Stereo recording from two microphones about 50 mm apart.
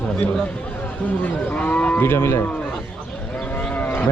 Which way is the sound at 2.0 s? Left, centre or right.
Left.